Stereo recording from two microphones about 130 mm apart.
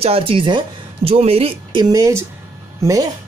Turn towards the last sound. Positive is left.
turn(degrees=-25)  # may be behind; listen again after turning